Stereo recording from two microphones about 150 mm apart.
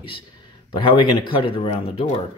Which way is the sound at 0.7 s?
35° left (ahead or behind).